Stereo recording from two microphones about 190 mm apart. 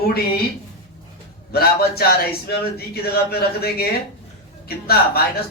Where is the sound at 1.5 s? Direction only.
55° left (ahead or behind).